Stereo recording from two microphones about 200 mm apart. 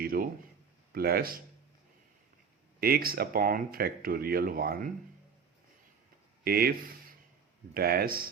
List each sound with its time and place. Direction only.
0.0 s a sound: 45° right (ahead or behind)
0.9 s speech: 50° right (ahead or behind)
2.8 s speech: 50° right (ahead or behind)
6.4 s speech: 50° right (ahead or behind)